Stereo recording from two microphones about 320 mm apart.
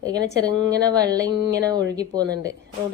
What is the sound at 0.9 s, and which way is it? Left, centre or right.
A woman's voice, centre.